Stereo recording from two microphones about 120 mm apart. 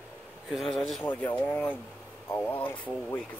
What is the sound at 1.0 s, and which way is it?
Speech, 15° left (ahead or behind).